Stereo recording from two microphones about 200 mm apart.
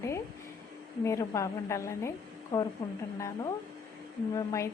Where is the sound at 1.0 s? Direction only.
15° left (ahead or behind).